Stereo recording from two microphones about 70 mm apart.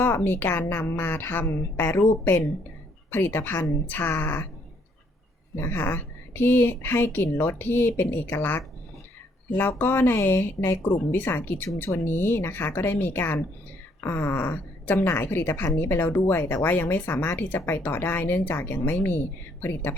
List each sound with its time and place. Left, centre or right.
0.0 s a woman's voice: left
5.5 s speech: left